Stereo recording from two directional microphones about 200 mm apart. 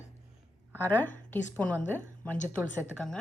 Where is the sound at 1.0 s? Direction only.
10° left (ahead or behind).